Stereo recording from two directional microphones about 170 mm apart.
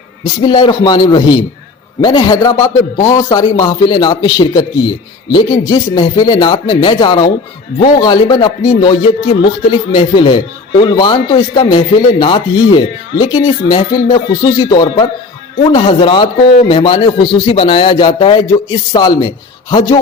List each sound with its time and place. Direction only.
0.4 s a man's voice: 25° left (ahead or behind)